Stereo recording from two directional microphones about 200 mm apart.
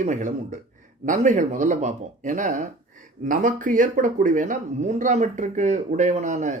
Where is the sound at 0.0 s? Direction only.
35° right (ahead or behind).